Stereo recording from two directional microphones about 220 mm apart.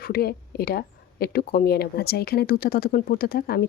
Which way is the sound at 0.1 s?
45° left (ahead or behind).